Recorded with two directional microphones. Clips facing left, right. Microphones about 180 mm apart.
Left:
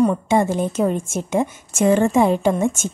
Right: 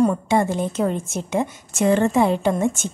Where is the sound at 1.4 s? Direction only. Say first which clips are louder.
Left 2 dB; 15° right (ahead or behind).